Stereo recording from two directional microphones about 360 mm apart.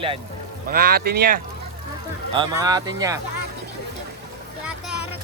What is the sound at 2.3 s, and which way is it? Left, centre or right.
Speech, centre.